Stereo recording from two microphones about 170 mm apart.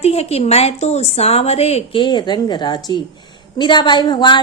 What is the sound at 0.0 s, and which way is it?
A woman's voice, 35° left (ahead or behind).